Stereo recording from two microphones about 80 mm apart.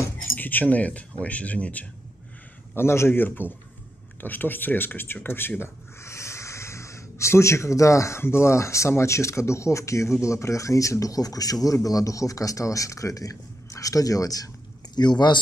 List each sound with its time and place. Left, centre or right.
0.4 s a man's voice: left
2.7 s a man's voice: left
15.0 s speech: left